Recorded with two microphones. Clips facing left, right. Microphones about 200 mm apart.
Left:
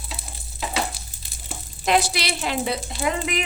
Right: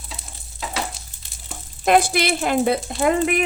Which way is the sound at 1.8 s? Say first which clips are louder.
Right 5 dB; 50° right (ahead or behind).